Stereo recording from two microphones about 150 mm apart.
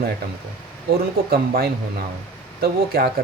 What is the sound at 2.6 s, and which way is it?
Speech, 90° right.